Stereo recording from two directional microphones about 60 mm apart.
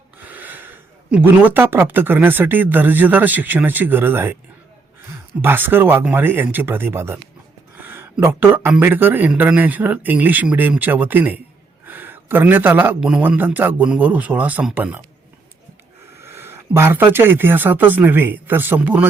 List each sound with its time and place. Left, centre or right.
0.3 s gasp: right
1.2 s speech: right
5.4 s speech: right
7.8 s a sound: right
8.8 s speech: right
13.0 s speech: centre
13.2 s speech: right
16.1 s speech: right
18.8 s speech: right